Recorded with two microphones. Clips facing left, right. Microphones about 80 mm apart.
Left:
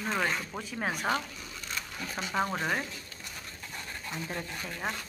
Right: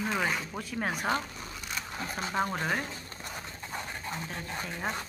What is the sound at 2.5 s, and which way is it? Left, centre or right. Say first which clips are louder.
Speech: even; centre.